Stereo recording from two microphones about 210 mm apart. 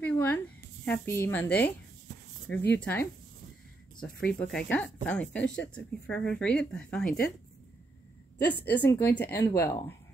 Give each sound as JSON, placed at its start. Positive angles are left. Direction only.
{"t": 0.0, "sound": "a sound", "side_deg": 10}
{"t": 0.8, "sound": "speech", "side_deg": 10}
{"t": 4.2, "sound": "speech", "side_deg": 5}
{"t": 5.4, "sound": "speech", "side_deg": 60}
{"t": 5.8, "sound": "speech", "side_deg": 5}
{"t": 8.5, "sound": "speech", "side_deg": 10}